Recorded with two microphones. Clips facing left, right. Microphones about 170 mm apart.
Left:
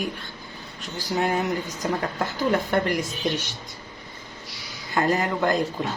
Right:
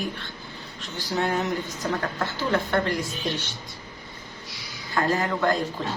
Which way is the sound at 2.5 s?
15° left (ahead or behind).